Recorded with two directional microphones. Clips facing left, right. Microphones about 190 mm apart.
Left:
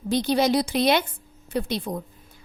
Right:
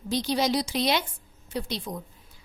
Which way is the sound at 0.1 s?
55° left (ahead or behind).